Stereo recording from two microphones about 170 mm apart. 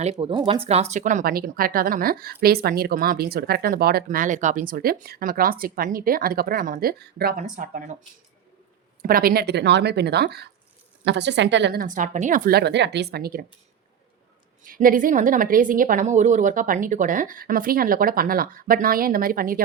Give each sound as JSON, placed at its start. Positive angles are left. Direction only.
{"t": 0.0, "sound": "a woman's voice", "side_deg": -35}
{"t": 9.0, "sound": "speech", "side_deg": -55}
{"t": 11.0, "sound": "speech", "side_deg": -90}
{"t": 14.6, "sound": "a woman's voice", "side_deg": -55}